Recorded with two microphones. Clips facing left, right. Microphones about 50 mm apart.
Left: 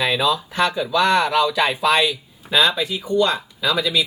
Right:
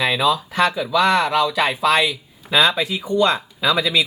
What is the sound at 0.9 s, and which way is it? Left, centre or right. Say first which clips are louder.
Speech: even; centre.